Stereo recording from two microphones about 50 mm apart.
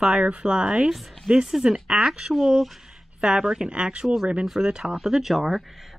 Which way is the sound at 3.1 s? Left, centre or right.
Centre.